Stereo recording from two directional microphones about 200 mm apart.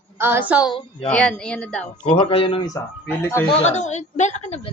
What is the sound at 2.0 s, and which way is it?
Speech, 25° left (ahead or behind).